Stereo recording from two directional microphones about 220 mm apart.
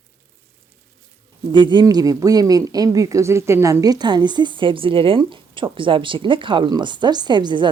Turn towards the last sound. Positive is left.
turn(degrees=-20)  # may be behind; listen again after turning